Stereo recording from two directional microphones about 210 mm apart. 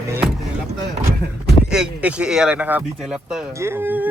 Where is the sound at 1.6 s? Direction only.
5° right (ahead or behind).